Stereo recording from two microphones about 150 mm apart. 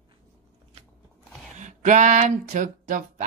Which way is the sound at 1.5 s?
55° right (ahead or behind).